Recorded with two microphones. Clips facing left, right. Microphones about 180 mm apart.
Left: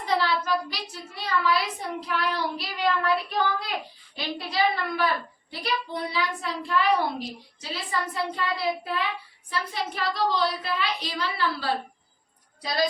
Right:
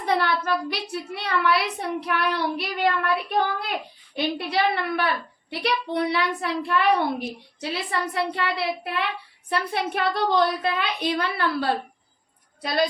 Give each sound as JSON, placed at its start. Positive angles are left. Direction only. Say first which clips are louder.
{"t": 0.0, "sound": "a child's voice", "louder": "right 2 dB", "side_deg": -55}